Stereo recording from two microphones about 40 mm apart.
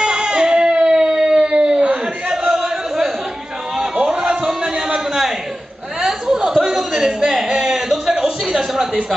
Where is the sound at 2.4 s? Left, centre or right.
Centre.